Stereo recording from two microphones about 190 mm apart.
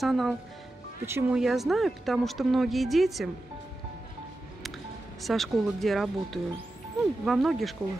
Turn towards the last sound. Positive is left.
turn(degrees=0)  # may be behind; listen again after turning